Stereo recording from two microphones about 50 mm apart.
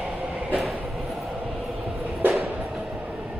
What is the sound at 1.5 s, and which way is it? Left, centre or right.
Train, centre.